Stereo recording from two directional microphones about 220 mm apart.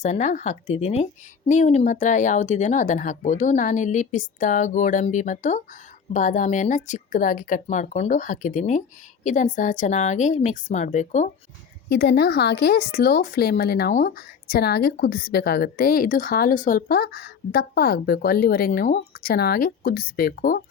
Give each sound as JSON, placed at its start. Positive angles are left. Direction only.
{"t": 0.0, "sound": "speech", "side_deg": 35}
{"t": 11.9, "sound": "speech", "side_deg": 50}